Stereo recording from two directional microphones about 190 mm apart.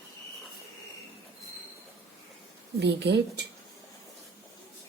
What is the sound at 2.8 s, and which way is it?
Speech, 60° right (ahead or behind).